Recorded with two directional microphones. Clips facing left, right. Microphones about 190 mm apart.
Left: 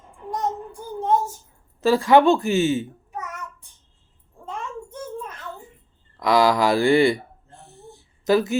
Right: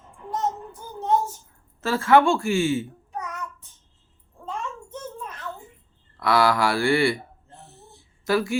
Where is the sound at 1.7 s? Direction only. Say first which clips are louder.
Left 3 dB; 15° left (ahead or behind).